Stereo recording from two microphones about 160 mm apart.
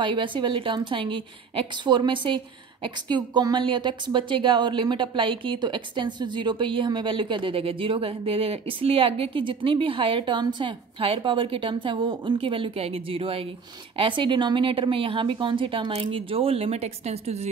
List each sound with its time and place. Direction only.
0.0 s a woman's voice: 30° right (ahead or behind)